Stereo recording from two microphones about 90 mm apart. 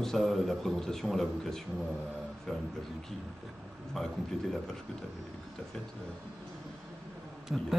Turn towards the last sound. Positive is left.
turn(degrees=0)  # may be behind; listen again after turning